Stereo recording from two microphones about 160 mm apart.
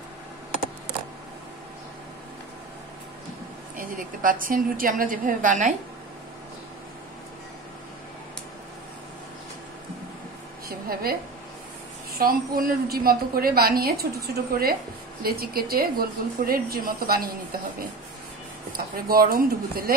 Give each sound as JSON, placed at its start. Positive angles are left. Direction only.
{"t": 3.7, "sound": "a woman's voice", "side_deg": -60}
{"t": 10.9, "sound": "a woman's voice", "side_deg": -70}
{"t": 12.2, "sound": "a woman's voice", "side_deg": -65}